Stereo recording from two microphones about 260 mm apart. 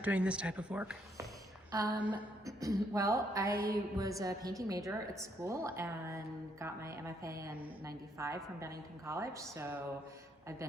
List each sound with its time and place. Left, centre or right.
0.0 s a woman's voice: centre
3.5 s music: right
3.9 s a woman's voice: centre